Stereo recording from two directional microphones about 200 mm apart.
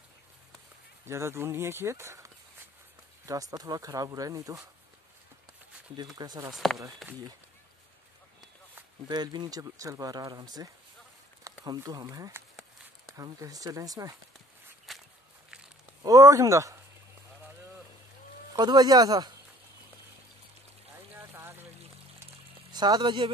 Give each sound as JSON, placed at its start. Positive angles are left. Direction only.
{"t": 1.0, "sound": "speech", "side_deg": -15}
{"t": 5.9, "sound": "speech", "side_deg": -20}
{"t": 6.5, "sound": "speech", "side_deg": 0}
{"t": 8.7, "sound": "speech", "side_deg": -20}
{"t": 14.9, "sound": "walk", "side_deg": 0}
{"t": 16.0, "sound": "speech", "side_deg": -20}
{"t": 18.5, "sound": "speech", "side_deg": -20}
{"t": 21.1, "sound": "a sound", "side_deg": -10}
{"t": 22.7, "sound": "speech", "side_deg": -20}